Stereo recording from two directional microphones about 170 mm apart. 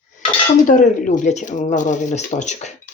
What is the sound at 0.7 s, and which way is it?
Speech, 50° left (ahead or behind).